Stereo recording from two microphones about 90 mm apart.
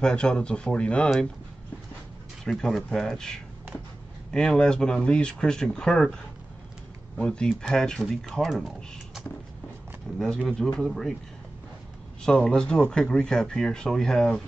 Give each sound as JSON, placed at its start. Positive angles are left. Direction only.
{"t": 0.0, "sound": "speech", "side_deg": 10}
{"t": 2.4, "sound": "speech", "side_deg": 5}
{"t": 7.2, "sound": "speech", "side_deg": 10}
{"t": 12.2, "sound": "speech", "side_deg": 10}